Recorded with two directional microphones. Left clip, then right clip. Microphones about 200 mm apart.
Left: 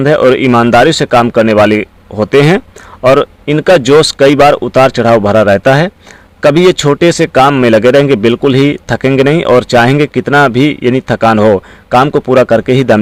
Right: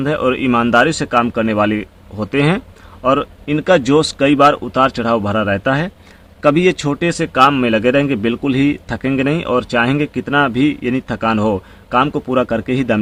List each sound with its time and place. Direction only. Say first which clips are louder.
0.0 s a man's voice: left 10 dB; 40° left (ahead or behind)